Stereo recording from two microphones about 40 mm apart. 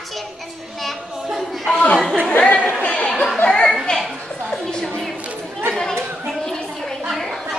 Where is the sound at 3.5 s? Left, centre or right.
Centre.